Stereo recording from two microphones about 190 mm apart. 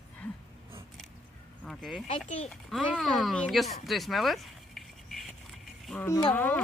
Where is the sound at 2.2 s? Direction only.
40° left (ahead or behind).